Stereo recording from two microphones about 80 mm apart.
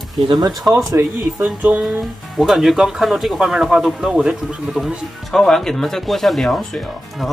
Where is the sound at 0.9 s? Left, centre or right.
Right.